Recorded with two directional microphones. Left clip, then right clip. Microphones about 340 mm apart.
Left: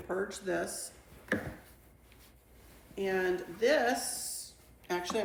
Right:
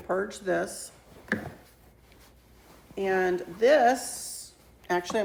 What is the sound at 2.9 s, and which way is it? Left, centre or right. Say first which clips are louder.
Speech: right 6 dB; right.